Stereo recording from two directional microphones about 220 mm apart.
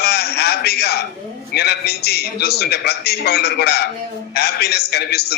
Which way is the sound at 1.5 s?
45° left (ahead or behind).